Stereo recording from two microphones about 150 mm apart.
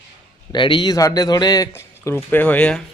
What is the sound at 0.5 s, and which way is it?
A man's voice, 30° left (ahead or behind).